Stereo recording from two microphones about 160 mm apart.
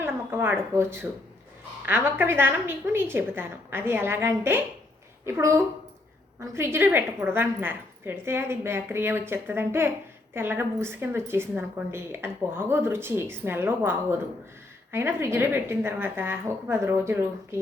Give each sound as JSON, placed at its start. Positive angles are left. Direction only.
{"t": 0.0, "sound": "a woman's voice", "side_deg": -15}